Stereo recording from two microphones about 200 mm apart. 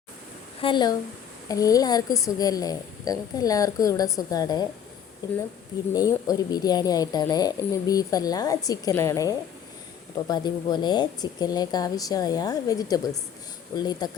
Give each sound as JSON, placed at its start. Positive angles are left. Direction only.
{"t": 0.6, "sound": "a woman's voice", "side_deg": 20}
{"t": 5.9, "sound": "speech", "side_deg": 20}